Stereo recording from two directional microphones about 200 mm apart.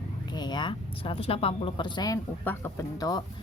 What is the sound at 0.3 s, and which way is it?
A woman's voice, 20° left (ahead or behind).